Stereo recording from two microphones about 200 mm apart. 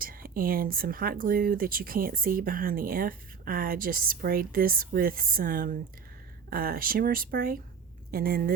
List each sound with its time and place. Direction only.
0.0 s speech: 45° right (ahead or behind)